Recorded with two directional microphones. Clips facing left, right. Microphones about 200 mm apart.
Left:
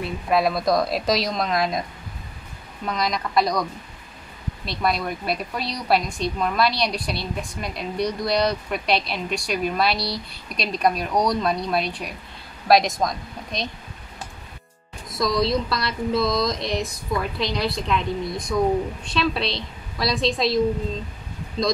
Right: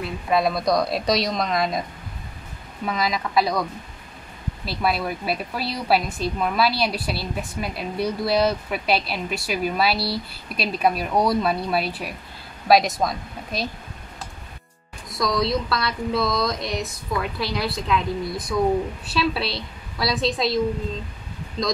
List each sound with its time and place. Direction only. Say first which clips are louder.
0.3 s a woman's voice: even; centre (ahead or behind)
4.6 s a woman's voice: even; 5° right (ahead or behind)
15.0 s music: left 1 dB; 20° left (ahead or behind)
15.3 s a woman's voice: left 1 dB; centre (ahead or behind)